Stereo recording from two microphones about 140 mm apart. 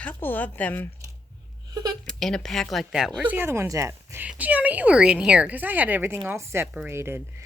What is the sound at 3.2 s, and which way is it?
A woman's voice, 15° right (ahead or behind).